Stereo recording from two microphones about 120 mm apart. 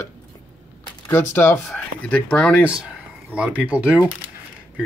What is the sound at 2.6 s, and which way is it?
Speech, 10° right (ahead or behind).